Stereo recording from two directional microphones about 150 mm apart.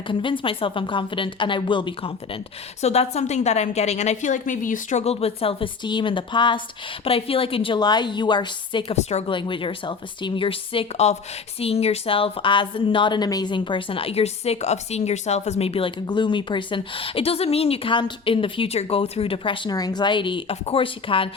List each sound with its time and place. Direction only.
0.1 s a woman's voice: 35° left (ahead or behind)
2.8 s a woman's voice: 45° left (ahead or behind)
9.0 s a woman's voice: 45° left (ahead or behind)
9.2 s a woman's voice: 35° left (ahead or behind)